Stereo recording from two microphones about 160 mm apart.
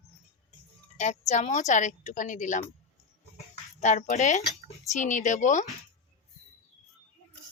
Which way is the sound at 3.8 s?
50° left (ahead or behind).